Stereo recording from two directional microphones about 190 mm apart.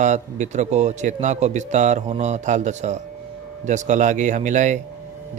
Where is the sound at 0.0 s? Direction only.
40° right (ahead or behind).